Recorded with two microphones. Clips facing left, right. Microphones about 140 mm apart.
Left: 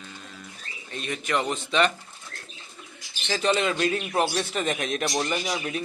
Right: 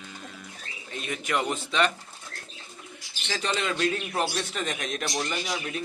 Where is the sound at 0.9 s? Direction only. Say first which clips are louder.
Left 2 dB; 5° right (ahead or behind).